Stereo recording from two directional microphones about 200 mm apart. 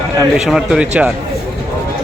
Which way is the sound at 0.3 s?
Centre (ahead or behind).